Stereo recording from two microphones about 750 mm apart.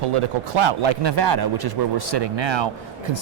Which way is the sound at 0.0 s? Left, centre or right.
Right.